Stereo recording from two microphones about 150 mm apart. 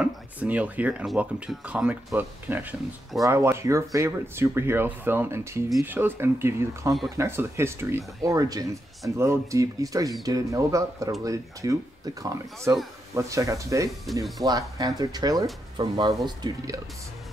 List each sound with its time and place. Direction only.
0.0 s speech: 10° right (ahead or behind)
14.1 s speech: centre (ahead or behind)
14.4 s speech: 25° right (ahead or behind)